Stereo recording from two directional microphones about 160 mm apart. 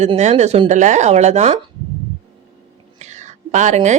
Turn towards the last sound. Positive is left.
turn(degrees=-50)  # may be behind; listen again after turning